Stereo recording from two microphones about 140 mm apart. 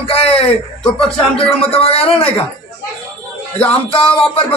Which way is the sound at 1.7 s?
45° left (ahead or behind).